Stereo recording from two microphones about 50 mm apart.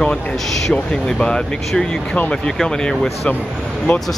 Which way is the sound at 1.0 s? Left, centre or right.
Centre.